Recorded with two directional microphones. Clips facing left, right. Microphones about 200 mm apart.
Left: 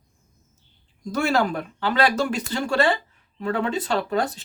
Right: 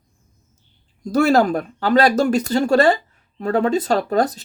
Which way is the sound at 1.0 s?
40° right (ahead or behind).